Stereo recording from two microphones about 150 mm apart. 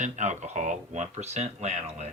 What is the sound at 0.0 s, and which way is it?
Speech, 50° right (ahead or behind).